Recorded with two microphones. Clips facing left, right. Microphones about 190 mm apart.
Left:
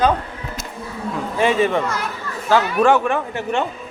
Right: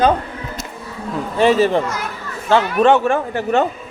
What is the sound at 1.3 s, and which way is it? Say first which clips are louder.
Speech: right 4 dB; 35° right (ahead or behind).